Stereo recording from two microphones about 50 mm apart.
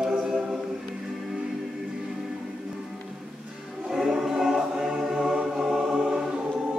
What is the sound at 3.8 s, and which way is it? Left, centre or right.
Choir, centre.